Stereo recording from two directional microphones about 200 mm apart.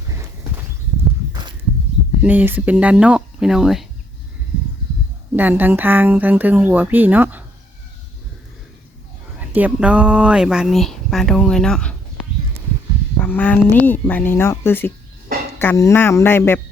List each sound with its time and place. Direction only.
1.3 s a sound: 20° right (ahead or behind)
2.2 s speech: 10° right (ahead or behind)
5.4 s speech: 10° right (ahead or behind)
9.4 s speech: 10° right (ahead or behind)
13.2 s speech: 10° left (ahead or behind)